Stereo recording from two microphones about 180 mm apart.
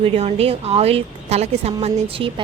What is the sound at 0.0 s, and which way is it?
A woman's voice, 35° right (ahead or behind).